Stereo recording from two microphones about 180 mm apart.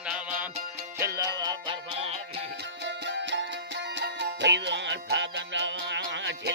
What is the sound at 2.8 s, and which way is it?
Music, 80° right.